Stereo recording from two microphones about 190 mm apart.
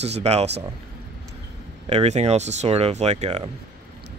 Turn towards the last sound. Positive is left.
turn(degrees=-35)  # may be behind; listen again after turning